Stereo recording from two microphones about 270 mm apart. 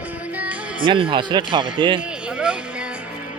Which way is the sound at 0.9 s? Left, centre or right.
Centre.